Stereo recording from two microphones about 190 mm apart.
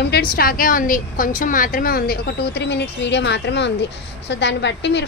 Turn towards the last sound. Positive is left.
turn(degrees=65)  # may be behind; listen again after turning